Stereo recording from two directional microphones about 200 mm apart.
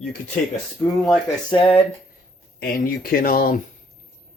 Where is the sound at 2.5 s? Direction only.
45° left (ahead or behind).